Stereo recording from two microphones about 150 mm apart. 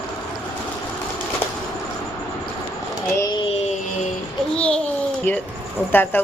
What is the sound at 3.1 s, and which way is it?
Speech, 25° left (ahead or behind).